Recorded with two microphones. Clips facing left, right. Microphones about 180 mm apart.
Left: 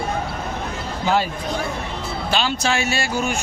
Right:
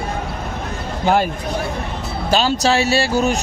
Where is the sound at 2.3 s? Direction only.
40° right (ahead or behind).